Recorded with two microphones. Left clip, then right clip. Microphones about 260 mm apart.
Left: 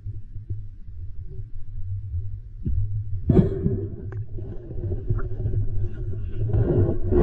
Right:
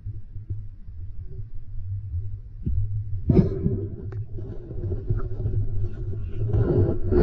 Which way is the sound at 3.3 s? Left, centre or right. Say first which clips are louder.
Left 1 dB; centre.